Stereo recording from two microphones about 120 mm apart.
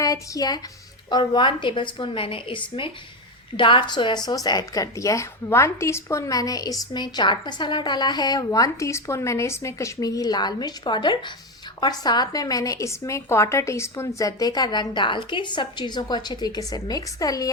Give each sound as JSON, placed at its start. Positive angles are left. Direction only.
{"t": 0.0, "sound": "a woman's voice", "side_deg": 30}